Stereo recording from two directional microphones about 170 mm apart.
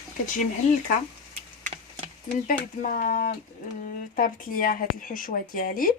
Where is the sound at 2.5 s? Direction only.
55° left (ahead or behind).